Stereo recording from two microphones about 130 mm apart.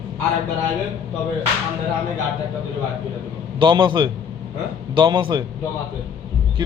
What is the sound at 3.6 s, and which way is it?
A man's voice, 35° right (ahead or behind).